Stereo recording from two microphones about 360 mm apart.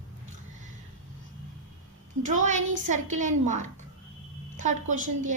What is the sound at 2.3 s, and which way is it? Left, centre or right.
A woman's voice, centre.